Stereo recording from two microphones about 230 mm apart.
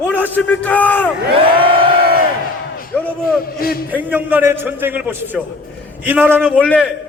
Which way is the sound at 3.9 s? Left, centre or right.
Centre.